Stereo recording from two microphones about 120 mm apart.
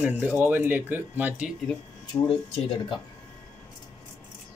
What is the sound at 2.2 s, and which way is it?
Speech, 50° left (ahead or behind).